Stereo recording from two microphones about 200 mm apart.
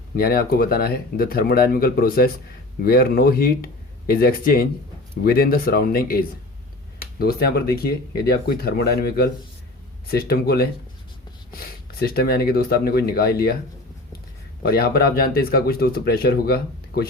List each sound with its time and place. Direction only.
0.2 s speech: 50° left (ahead or behind)
14.6 s speech: 50° left (ahead or behind)